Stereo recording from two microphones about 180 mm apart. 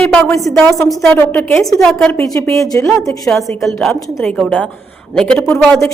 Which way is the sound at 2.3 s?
15° left (ahead or behind).